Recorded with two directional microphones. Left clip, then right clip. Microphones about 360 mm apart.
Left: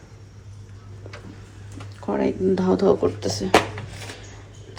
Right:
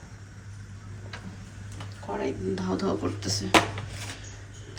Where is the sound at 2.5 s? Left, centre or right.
Centre.